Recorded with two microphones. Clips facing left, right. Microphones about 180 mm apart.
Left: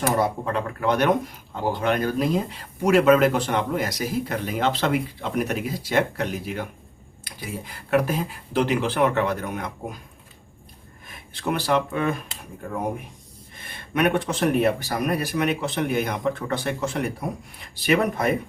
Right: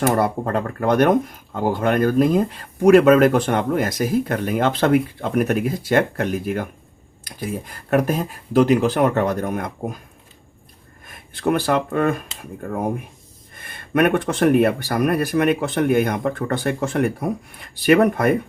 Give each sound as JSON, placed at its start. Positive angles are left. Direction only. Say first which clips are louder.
{"t": 0.2, "sound": "speech", "louder": "right 3 dB", "side_deg": -50}
{"t": 11.1, "sound": "speech", "louder": "right 6 dB", "side_deg": -55}
{"t": 13.6, "sound": "speech", "louder": "right 5 dB", "side_deg": -55}